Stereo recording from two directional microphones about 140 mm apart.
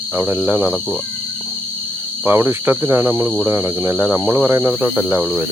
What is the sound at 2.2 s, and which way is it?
Speech, 15° right (ahead or behind).